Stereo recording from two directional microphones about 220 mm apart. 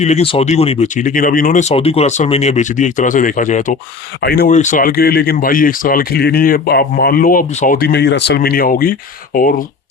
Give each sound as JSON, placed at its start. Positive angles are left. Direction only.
{"t": 0.0, "sound": "speech", "side_deg": 30}